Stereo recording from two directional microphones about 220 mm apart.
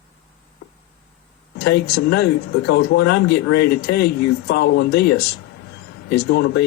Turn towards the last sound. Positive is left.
turn(degrees=50)  # may be behind; listen again after turning